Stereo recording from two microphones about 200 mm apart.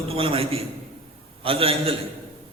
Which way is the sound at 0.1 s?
30° right (ahead or behind).